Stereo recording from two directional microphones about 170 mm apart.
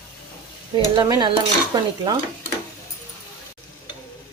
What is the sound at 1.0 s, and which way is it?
Stir, 25° right (ahead or behind).